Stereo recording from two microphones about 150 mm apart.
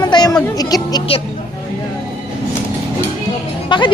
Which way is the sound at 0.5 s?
25° left (ahead or behind).